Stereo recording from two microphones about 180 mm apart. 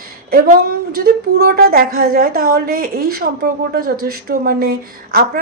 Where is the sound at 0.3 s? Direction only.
55° right (ahead or behind).